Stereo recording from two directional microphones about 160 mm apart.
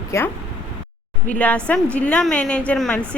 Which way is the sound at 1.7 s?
5° left (ahead or behind).